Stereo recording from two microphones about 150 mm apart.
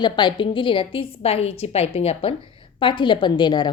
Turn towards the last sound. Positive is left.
turn(degrees=30)  # may be behind; listen again after turning